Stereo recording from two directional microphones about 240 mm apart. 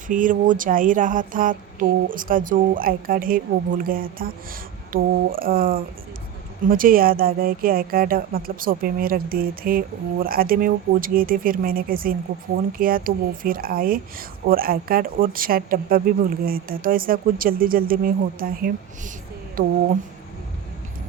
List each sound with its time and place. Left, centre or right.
0.1 s speech: right